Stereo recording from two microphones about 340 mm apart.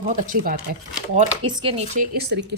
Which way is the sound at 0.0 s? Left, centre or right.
Right.